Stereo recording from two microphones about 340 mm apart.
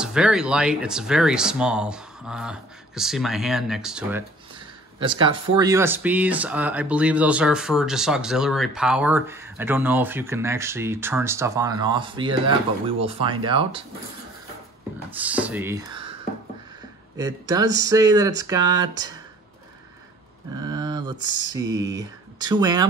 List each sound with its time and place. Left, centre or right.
0.0 s speech: centre
4.9 s speech: centre
15.0 s speech: centre
17.2 s speech: centre
20.5 s speech: centre
21.2 s speech: right
21.6 s speech: right
21.9 s speech: centre